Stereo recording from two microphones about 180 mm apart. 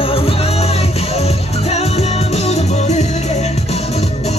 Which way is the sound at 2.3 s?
40° left (ahead or behind).